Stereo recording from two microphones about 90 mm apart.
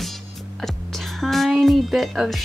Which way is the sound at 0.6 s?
Centre (ahead or behind).